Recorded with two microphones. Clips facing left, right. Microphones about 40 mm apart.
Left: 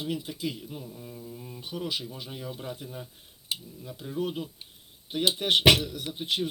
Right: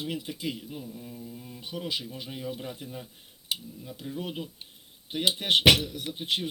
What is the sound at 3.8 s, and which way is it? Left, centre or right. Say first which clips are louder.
Speech: left 4 dB; centre.